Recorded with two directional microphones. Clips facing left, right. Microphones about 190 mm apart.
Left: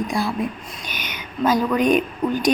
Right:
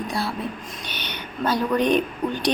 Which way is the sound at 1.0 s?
10° left (ahead or behind).